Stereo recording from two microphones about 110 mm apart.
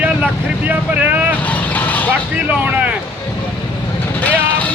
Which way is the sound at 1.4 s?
15° left (ahead or behind).